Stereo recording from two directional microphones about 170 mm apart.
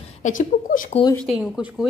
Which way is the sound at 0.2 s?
50° left (ahead or behind).